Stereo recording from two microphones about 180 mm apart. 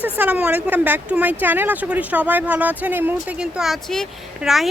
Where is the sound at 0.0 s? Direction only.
10° right (ahead or behind).